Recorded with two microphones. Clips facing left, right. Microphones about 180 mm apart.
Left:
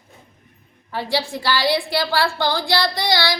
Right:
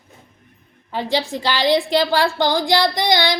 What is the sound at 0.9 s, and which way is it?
A woman's voice, 20° right (ahead or behind).